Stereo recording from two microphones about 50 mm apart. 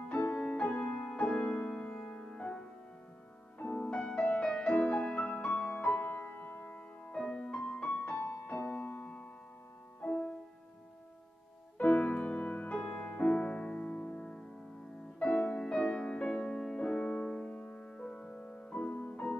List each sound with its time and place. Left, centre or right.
0.3 s music: left
3.6 s music: left
3.9 s music: left
5.8 s music: left
7.1 s music: left
10.0 s music: centre
11.8 s music: left
12.7 s music: centre; by 19.3 s left